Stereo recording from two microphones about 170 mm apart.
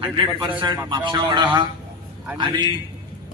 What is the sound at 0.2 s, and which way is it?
A man's voice, 30° right (ahead or behind).